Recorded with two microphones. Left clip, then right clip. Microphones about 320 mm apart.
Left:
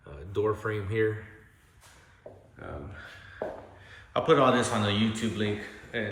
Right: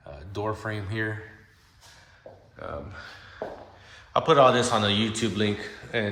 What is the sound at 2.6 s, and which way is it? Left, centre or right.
A man's voice, centre.